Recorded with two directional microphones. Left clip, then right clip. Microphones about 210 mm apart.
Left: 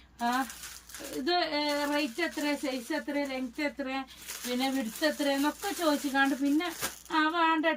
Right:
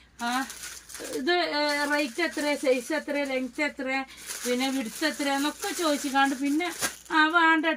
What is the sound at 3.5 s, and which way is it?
Speech, 15° right (ahead or behind).